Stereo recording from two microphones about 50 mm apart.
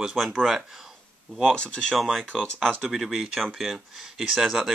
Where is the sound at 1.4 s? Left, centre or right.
Centre.